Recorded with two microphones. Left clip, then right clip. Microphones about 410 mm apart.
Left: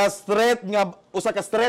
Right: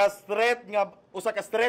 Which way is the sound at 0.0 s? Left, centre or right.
Left.